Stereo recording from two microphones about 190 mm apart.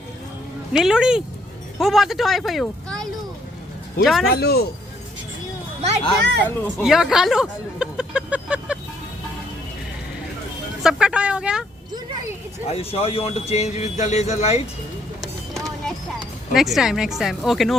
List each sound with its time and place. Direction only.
0.7 s speech: 5° right (ahead or behind)
4.3 s speech: 55° left (ahead or behind)
6.4 s speech: 10° left (ahead or behind)
6.8 s speech: centre (ahead or behind)
10.8 s speech: 5° right (ahead or behind)
12.6 s speech: 30° left (ahead or behind)
15.2 s a sound: centre (ahead or behind)
16.5 s speech: centre (ahead or behind)